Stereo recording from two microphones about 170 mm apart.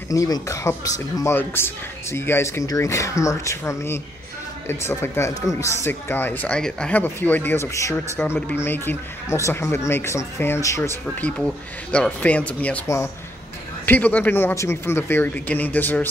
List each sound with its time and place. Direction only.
0.1 s speech: 20° left (ahead or behind)